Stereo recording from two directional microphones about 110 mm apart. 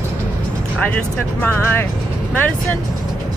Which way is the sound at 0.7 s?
15° left (ahead or behind).